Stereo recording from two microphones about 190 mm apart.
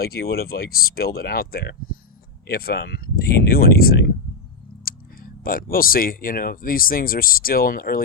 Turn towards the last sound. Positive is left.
turn(degrees=50)  # may be behind; listen again after turning